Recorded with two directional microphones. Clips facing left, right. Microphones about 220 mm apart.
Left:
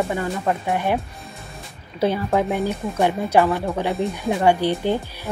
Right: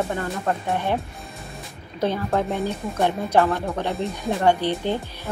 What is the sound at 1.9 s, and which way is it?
Speech, 10° left (ahead or behind).